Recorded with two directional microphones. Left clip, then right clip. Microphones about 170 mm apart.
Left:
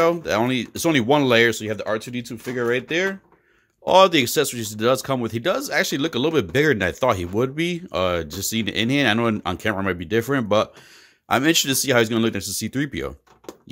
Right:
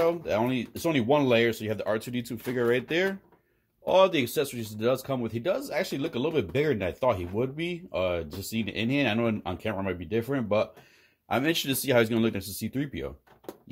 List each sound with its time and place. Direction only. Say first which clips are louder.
0.0 s speech: left 6 dB; 35° left (ahead or behind)
1.7 s speech: left 4 dB; 15° left (ahead or behind)
3.8 s speech: left 7 dB; 35° left (ahead or behind)